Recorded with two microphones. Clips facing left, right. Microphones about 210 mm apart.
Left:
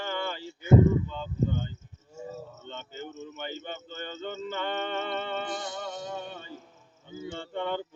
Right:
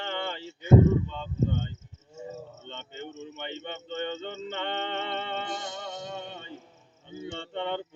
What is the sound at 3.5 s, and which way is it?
Speech, 70° right (ahead or behind).